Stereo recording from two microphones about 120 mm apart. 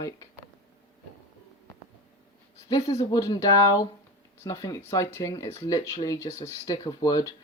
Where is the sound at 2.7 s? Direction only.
30° left (ahead or behind).